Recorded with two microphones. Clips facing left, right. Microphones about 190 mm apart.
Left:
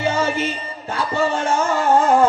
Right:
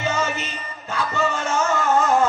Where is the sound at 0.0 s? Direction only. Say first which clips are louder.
Left 4 dB; 30° left (ahead or behind).